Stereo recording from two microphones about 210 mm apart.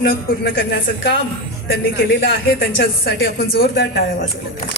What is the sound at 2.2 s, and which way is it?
A woman's voice, 50° left (ahead or behind).